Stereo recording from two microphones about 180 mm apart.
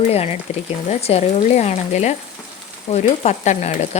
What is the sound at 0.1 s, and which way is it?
Speech, 35° left (ahead or behind).